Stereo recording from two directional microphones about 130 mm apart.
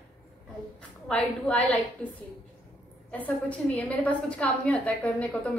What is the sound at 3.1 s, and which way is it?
A woman's voice, 10° left (ahead or behind).